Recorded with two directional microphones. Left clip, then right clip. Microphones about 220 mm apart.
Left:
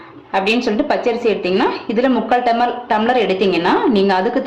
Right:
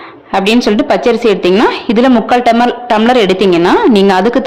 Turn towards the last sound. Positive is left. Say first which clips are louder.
# right 6 dB
turn(degrees=-50)  # may be behind; listen again after turning